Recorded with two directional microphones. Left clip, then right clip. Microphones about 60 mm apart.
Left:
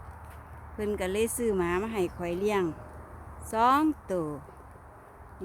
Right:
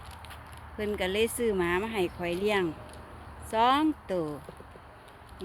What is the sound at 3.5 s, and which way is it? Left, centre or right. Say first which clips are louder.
Speech: left 1 dB; left.